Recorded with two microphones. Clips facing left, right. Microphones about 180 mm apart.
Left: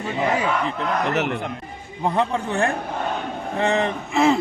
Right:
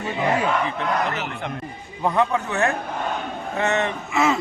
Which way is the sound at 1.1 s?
65° left (ahead or behind).